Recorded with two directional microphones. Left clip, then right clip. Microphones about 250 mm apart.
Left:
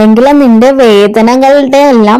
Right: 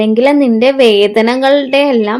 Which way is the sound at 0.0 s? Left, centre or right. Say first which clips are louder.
Left 5 dB; left.